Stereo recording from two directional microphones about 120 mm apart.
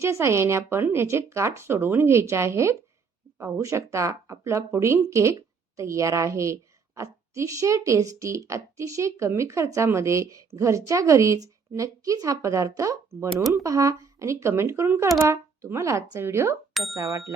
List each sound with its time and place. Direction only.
0.0 s speech: 25° right (ahead or behind)